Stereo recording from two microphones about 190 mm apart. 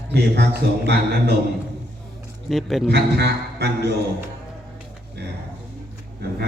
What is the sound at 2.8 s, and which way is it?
Speech, 60° right (ahead or behind).